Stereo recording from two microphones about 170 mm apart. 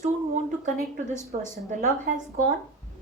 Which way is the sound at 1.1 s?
45° right (ahead or behind).